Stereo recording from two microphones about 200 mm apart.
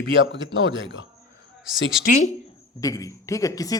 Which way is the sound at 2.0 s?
40° left (ahead or behind).